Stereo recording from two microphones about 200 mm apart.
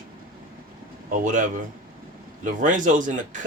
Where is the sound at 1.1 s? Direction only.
40° right (ahead or behind).